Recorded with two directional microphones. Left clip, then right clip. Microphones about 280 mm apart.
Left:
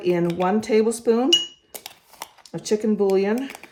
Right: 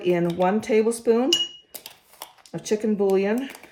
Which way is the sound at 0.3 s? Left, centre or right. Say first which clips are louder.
Left 1 dB; centre.